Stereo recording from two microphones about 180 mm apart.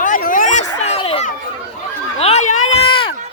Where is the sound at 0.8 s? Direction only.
35° left (ahead or behind).